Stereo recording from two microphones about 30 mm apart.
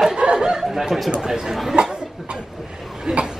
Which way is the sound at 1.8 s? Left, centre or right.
Right.